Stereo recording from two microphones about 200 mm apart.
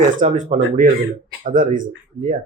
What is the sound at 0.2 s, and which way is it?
Speech, 40° right (ahead or behind).